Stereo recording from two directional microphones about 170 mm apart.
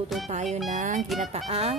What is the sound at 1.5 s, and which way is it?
Speech, 35° right (ahead or behind).